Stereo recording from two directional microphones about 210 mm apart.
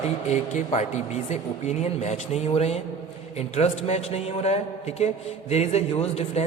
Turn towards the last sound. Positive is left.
turn(degrees=30)  # may be behind; listen again after turning